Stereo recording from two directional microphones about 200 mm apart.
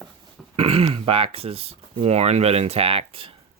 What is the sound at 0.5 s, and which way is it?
Speech, 30° right (ahead or behind).